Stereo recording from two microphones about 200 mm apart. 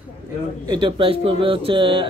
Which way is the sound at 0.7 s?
25° right (ahead or behind).